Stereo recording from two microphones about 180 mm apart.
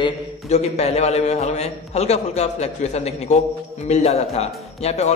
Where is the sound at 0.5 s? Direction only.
35° left (ahead or behind).